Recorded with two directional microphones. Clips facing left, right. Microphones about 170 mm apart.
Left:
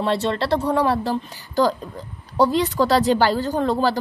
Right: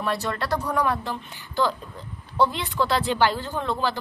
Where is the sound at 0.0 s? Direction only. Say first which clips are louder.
Left 6 dB; 25° left (ahead or behind).